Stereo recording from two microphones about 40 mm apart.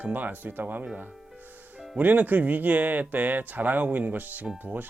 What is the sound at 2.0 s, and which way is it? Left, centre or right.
Speech, right.